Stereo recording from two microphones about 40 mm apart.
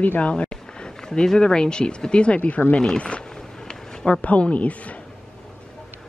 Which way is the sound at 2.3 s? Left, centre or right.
Left.